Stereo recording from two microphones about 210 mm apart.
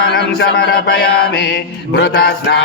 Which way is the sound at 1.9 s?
50° left (ahead or behind).